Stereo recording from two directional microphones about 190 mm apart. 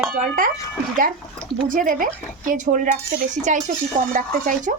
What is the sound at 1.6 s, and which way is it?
Speech, 45° right (ahead or behind).